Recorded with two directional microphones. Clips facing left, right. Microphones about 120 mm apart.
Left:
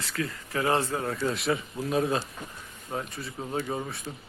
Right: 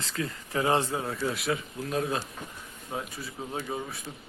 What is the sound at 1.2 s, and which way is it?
Speech, centre (ahead or behind).